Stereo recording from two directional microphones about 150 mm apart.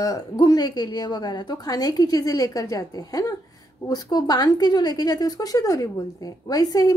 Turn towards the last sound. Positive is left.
turn(degrees=25)  # may be behind; listen again after turning